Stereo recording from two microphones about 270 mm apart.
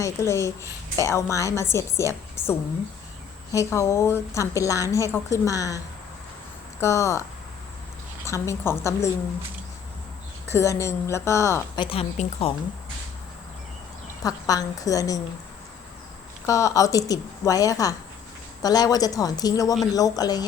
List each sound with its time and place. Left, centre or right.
0.0 s a woman's voice: centre
8.3 s a woman's voice: centre
10.5 s a woman's voice: centre
11.9 s speech: left
14.3 s a woman's voice: centre
16.5 s a woman's voice: centre